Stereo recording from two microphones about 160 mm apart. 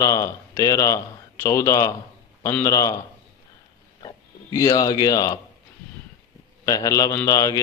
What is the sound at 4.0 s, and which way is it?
Speech, 25° left (ahead or behind).